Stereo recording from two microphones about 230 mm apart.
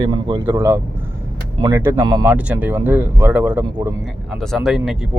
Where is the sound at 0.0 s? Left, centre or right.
Centre.